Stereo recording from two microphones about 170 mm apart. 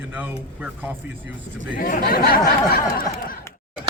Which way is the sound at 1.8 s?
55° left (ahead or behind).